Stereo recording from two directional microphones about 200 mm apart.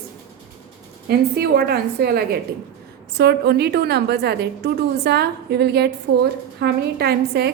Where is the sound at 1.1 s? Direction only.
50° right (ahead or behind).